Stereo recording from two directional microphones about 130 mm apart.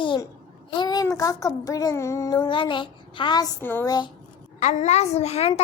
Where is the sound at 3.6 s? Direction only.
15° left (ahead or behind).